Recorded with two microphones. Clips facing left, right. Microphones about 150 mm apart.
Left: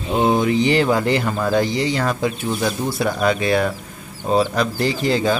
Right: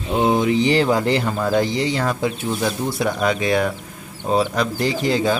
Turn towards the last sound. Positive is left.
turn(degrees=-15)  # may be behind; listen again after turning